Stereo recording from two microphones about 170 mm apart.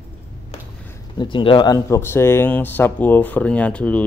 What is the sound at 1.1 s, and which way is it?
Speech, 30° left (ahead or behind).